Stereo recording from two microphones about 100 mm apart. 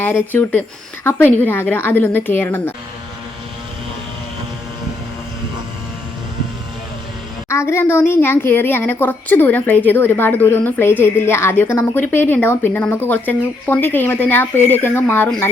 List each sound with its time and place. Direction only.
1.0 s a woman's voice: 20° left (ahead or behind)
7.5 s a woman's voice: 25° left (ahead or behind)